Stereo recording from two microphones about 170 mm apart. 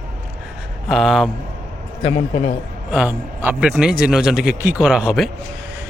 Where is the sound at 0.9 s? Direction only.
Centre (ahead or behind).